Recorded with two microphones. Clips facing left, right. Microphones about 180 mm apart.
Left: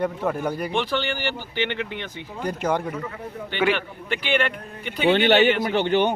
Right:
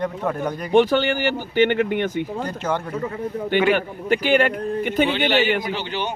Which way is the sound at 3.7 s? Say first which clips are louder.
Right 8 dB; 40° right (ahead or behind).